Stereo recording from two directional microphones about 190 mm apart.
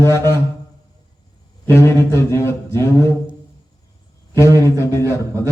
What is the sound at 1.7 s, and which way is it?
A man's voice, 15° left (ahead or behind).